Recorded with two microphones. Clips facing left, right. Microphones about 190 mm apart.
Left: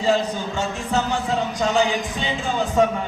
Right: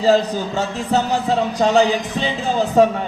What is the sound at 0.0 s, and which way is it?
Speech, 35° right (ahead or behind).